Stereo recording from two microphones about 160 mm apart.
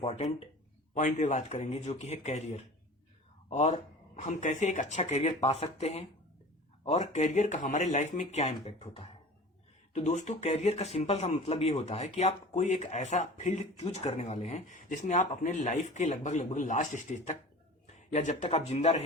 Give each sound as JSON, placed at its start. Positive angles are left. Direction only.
{"t": 0.0, "sound": "speech", "side_deg": 40}
{"t": 0.9, "sound": "speech", "side_deg": 50}